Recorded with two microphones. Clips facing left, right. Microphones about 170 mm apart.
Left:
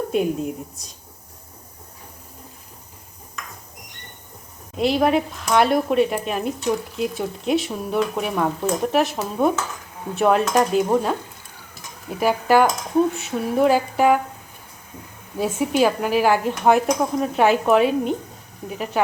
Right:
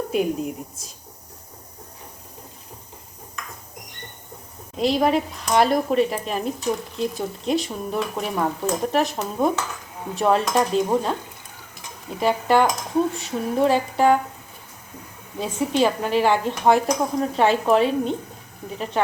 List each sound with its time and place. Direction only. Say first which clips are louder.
0.1 s speech: even; centre (ahead or behind)
4.8 s speech: left 1 dB; centre (ahead or behind)
12.2 s speech: left 2 dB; 5° left (ahead or behind)
15.4 s speech: left 2 dB; 5° left (ahead or behind)